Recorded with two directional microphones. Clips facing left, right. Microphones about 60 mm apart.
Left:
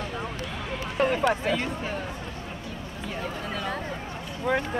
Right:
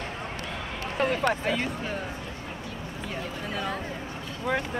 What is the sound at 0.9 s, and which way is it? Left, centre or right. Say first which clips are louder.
Speech: left 2 dB; centre.